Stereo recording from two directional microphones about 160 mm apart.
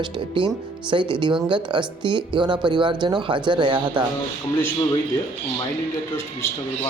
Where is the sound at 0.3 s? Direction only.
30° right (ahead or behind).